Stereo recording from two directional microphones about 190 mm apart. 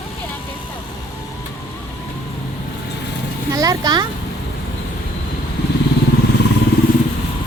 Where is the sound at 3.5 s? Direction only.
20° right (ahead or behind).